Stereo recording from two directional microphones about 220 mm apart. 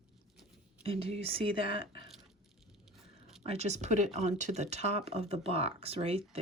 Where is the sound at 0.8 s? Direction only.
25° right (ahead or behind).